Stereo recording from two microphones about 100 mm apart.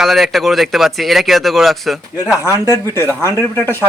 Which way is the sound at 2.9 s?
25° left (ahead or behind).